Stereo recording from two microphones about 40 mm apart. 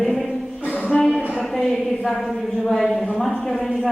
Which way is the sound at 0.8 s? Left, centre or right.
Left.